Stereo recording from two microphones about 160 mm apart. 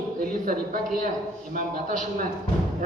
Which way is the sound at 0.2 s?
60° right (ahead or behind).